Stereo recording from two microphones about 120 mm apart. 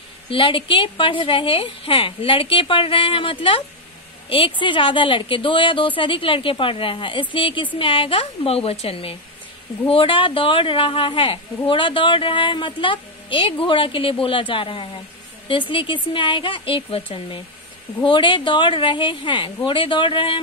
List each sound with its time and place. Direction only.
0.3 s a woman's voice: 45° left (ahead or behind)